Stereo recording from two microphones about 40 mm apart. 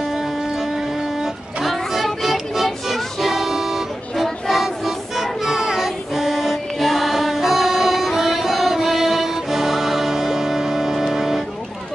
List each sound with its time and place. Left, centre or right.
1.2 s music: centre